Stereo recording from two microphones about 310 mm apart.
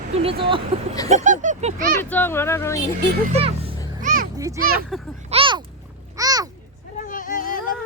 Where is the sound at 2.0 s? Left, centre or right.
Centre.